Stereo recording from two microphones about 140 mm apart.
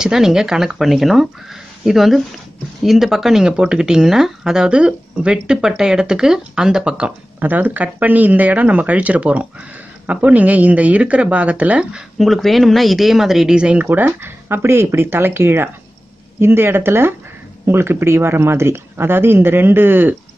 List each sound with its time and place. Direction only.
0.0 s speech: 5° right (ahead or behind)